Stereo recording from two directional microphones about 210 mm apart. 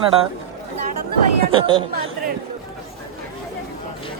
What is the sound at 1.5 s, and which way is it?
Speech, 25° right (ahead or behind).